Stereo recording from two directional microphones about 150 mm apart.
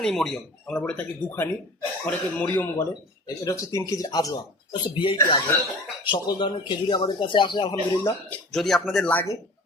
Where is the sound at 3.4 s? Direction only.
20° left (ahead or behind).